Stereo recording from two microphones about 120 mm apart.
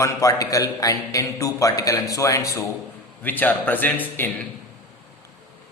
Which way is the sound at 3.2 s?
15° left (ahead or behind).